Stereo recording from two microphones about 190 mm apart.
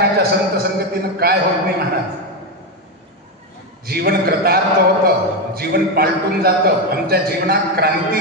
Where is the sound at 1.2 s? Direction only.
55° right (ahead or behind).